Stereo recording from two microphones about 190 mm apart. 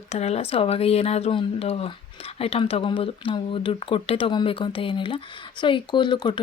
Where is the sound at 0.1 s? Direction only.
35° left (ahead or behind).